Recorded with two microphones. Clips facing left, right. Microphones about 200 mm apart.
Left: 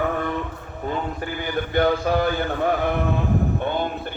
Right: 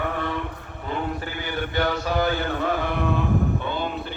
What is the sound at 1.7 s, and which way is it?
Speech, 50° left (ahead or behind).